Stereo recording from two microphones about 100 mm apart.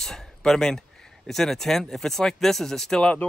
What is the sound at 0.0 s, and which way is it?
Speech, 5° left (ahead or behind).